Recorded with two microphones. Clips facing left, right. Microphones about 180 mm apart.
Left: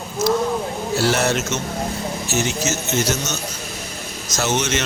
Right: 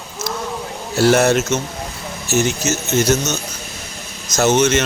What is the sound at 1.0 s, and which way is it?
Speech, 50° right (ahead or behind).